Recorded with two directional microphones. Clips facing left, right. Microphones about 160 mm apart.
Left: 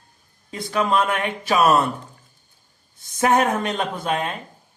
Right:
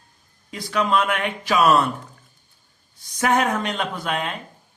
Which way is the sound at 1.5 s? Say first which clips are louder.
Even; 25° left (ahead or behind).